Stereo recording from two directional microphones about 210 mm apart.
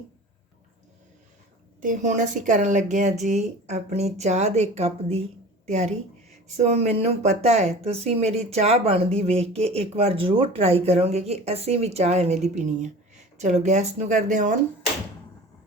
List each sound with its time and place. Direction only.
1.8 s a woman's voice: 35° right (ahead or behind)